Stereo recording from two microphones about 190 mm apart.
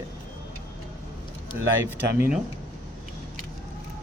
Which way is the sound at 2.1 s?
10° right (ahead or behind).